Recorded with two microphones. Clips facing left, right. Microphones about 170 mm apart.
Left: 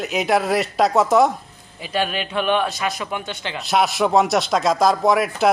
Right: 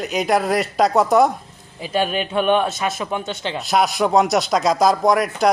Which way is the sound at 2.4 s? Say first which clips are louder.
Right 1 dB; centre (ahead or behind).